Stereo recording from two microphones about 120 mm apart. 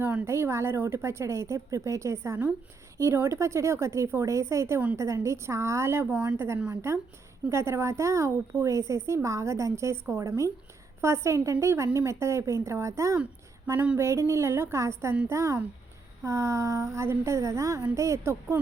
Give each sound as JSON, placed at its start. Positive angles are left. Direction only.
{"t": 0.0, "sound": "a woman's voice", "side_deg": -20}